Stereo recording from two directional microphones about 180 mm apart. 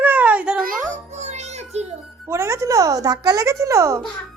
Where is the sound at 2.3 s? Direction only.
15° right (ahead or behind).